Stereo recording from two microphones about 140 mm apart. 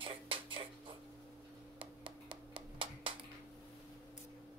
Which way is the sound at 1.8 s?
40° right (ahead or behind).